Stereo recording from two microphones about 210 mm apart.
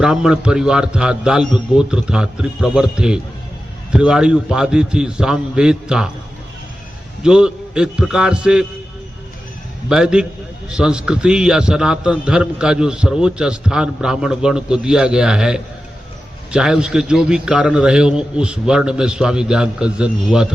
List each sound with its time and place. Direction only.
0.0 s a man's voice: 5° right (ahead or behind)
7.2 s a man's voice: 5° right (ahead or behind)
9.9 s a man's voice: 5° right (ahead or behind)